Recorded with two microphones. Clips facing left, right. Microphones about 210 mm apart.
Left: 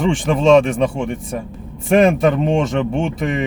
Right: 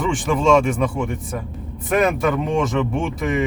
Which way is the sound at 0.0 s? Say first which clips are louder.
Left 3 dB; 25° left (ahead or behind).